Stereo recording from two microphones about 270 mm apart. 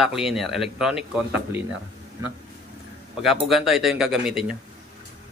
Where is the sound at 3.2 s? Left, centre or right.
Centre.